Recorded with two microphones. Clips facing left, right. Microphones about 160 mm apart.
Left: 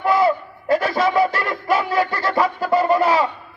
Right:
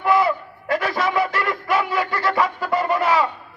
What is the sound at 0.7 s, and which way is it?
Music, 30° left (ahead or behind).